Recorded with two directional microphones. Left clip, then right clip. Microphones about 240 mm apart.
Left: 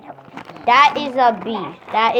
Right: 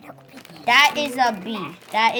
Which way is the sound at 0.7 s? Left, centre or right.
Right.